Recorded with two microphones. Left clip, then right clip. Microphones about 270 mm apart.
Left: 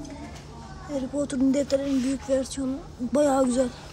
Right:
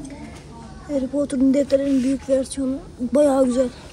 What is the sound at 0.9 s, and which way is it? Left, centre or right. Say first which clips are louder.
Speech: right 6 dB; centre.